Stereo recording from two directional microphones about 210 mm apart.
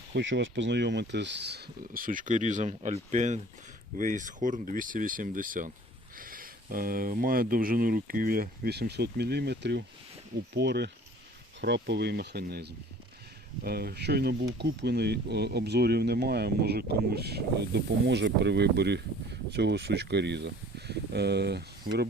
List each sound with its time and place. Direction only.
0.1 s speech: 60° right (ahead or behind)